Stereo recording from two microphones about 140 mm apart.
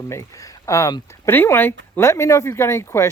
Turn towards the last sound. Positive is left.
turn(degrees=20)  # may be behind; listen again after turning